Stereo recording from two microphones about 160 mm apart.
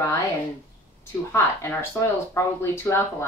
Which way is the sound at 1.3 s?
15° left (ahead or behind).